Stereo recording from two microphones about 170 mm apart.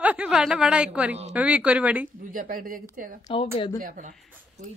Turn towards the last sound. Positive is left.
turn(degrees=-50)  # may be behind; listen again after turning